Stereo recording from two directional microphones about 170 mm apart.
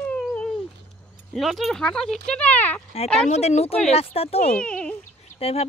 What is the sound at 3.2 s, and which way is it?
Speech, 40° left (ahead or behind).